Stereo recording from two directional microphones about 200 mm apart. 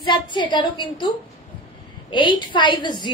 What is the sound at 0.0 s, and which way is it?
A woman's voice, 25° left (ahead or behind).